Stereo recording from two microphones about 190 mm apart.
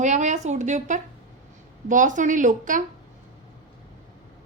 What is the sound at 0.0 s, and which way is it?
A woman's voice, 40° right (ahead or behind).